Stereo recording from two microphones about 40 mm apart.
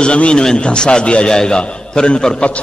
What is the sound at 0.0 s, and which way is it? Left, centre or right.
A man's voice, left.